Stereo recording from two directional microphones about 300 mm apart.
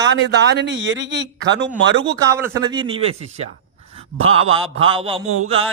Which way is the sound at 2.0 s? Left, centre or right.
Centre.